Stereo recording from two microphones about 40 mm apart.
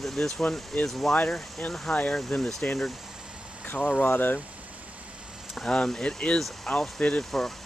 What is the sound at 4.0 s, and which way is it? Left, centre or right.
Speech, left.